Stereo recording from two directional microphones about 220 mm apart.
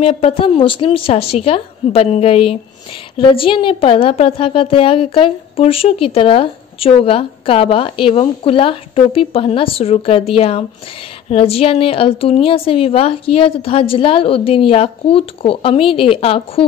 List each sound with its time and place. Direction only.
0.0 s a woman's voice: 25° left (ahead or behind)